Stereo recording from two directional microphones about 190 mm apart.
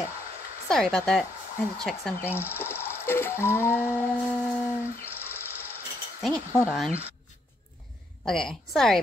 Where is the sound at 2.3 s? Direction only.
10° right (ahead or behind).